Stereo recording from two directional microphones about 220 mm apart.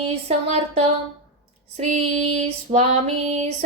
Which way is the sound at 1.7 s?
30° right (ahead or behind).